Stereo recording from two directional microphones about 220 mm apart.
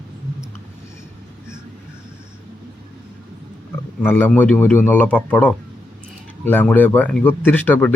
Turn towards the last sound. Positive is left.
turn(degrees=10)  # may be behind; listen again after turning